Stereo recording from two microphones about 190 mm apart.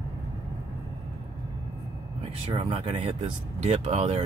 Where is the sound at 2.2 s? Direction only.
30° right (ahead or behind).